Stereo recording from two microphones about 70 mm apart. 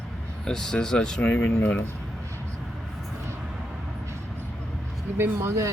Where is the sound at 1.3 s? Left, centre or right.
Left.